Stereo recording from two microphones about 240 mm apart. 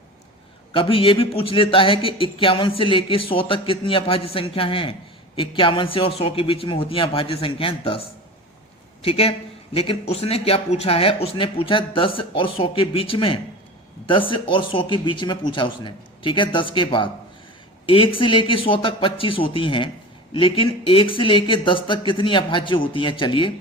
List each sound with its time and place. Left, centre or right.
0.7 s a man's voice: left